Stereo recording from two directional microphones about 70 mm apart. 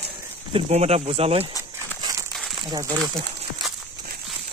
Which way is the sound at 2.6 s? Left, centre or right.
Right.